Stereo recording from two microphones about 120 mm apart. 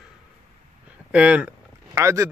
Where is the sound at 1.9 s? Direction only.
25° right (ahead or behind).